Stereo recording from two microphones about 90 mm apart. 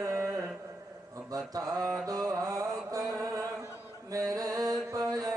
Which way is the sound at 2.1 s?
40° right (ahead or behind).